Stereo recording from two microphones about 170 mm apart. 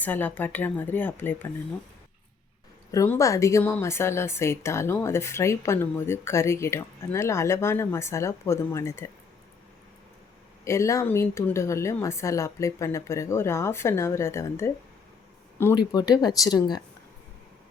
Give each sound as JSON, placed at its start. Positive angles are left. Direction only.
{"t": 0.0, "sound": "speech", "side_deg": 10}
{"t": 2.9, "sound": "speech", "side_deg": 20}
{"t": 10.6, "sound": "speech", "side_deg": 15}
{"t": 15.7, "sound": "speech", "side_deg": 25}